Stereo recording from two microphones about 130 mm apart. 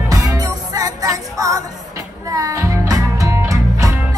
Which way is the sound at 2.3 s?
25° right (ahead or behind).